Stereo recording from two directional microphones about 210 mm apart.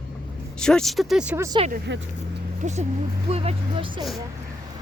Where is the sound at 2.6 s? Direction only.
35° right (ahead or behind).